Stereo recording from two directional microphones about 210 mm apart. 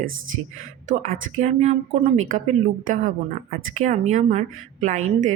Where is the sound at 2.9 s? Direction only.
40° right (ahead or behind).